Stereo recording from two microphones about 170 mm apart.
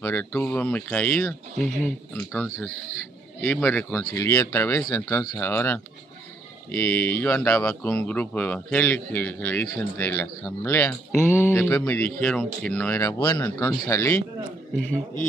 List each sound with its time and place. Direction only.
0.0 s speech: 15° left (ahead or behind)